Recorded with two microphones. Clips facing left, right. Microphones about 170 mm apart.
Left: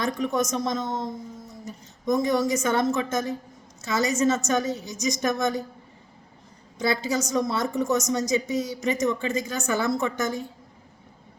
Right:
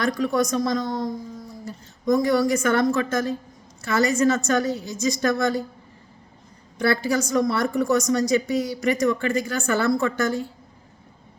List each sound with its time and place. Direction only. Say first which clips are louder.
0.2 s a woman's voice: right 3 dB; 20° left (ahead or behind)
6.7 s a woman's voice: right 3 dB; 20° left (ahead or behind)